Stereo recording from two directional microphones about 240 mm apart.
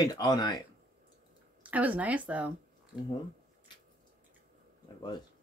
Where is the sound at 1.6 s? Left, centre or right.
Centre.